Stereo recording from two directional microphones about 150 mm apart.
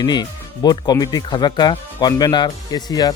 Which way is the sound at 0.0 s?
30° left (ahead or behind).